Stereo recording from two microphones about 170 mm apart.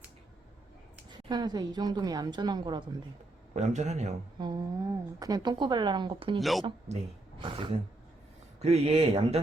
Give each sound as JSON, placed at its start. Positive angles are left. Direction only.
{"t": 1.3, "sound": "a woman's voice", "side_deg": -25}
{"t": 3.5, "sound": "speech", "side_deg": -45}
{"t": 4.4, "sound": "humming", "side_deg": -25}
{"t": 5.2, "sound": "a woman's voice", "side_deg": -25}
{"t": 6.4, "sound": "speech", "side_deg": 0}
{"t": 6.7, "sound": "speech", "side_deg": -40}